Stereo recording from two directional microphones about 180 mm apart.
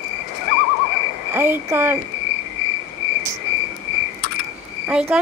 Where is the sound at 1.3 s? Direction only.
10° right (ahead or behind).